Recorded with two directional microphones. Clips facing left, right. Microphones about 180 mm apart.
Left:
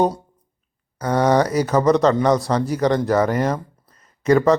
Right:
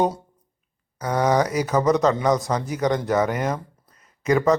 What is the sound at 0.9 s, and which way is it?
A man's voice, 10° right (ahead or behind).